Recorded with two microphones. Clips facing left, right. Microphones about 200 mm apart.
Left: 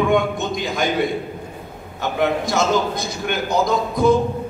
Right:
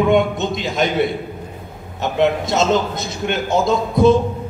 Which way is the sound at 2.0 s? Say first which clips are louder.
Right 3 dB; 20° right (ahead or behind).